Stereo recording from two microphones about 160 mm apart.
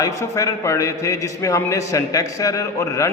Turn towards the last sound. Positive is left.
turn(degrees=20)  # may be behind; listen again after turning